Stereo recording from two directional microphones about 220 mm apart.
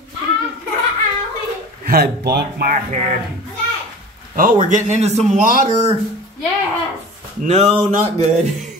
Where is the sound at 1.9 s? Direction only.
45° right (ahead or behind).